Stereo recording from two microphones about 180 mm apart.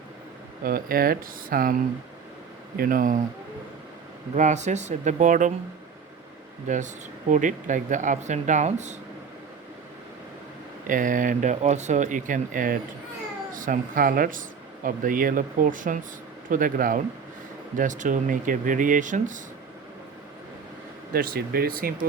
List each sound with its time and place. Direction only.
0.6 s speech: 55° right (ahead or behind)
2.7 s speech: 50° right (ahead or behind)
4.4 s speech: 40° right (ahead or behind)
6.7 s speech: 45° right (ahead or behind)
10.8 s speech: 45° right (ahead or behind)
21.1 s speech: 55° right (ahead or behind)